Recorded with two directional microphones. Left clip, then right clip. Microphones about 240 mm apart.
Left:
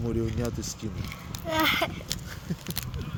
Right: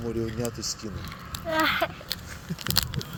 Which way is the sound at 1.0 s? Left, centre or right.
Left.